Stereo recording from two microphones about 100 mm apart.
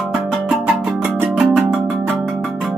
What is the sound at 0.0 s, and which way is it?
Music, 5° right (ahead or behind).